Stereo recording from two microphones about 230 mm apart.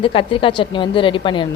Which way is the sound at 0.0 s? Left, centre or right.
Left.